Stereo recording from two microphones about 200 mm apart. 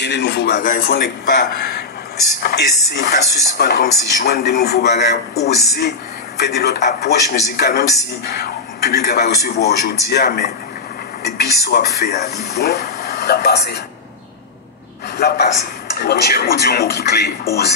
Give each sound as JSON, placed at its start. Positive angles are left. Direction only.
{"t": 0.0, "sound": "speech", "side_deg": 60}
{"t": 15.1, "sound": "speech", "side_deg": 55}